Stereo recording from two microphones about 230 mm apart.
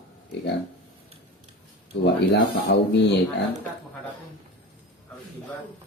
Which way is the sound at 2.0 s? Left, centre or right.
Left.